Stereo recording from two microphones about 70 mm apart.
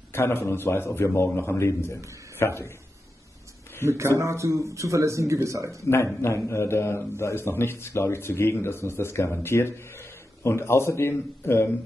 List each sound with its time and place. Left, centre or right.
0.1 s speech: left
3.8 s a man's voice: right
6.5 s speech: left